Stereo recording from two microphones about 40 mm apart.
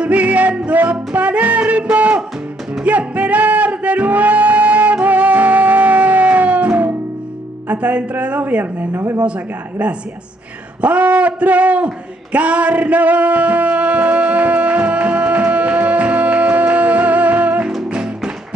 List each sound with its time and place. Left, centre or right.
0.0 s music: right
9.2 s a man's voice: right
10.8 s a sound: right
17.8 s music: right